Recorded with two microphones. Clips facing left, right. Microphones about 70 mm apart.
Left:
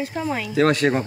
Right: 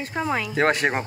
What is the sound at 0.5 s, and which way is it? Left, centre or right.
Speech, right.